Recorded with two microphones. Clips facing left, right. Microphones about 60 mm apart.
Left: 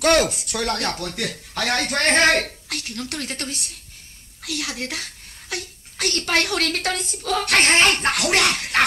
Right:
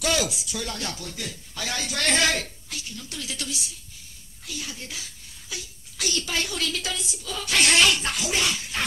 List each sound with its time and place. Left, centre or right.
0.0 s speech: left
2.4 s speech: left
4.4 s a child's voice: left
7.6 s speech: left